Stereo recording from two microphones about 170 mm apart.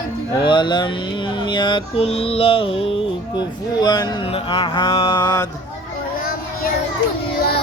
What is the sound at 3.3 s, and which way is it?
Mantra, 25° left (ahead or behind).